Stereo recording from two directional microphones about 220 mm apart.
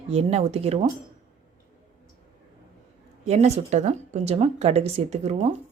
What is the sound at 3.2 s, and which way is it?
Speech, 30° right (ahead or behind).